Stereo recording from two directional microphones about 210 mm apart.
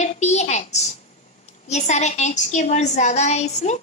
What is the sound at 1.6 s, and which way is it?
A woman's voice, 30° left (ahead or behind).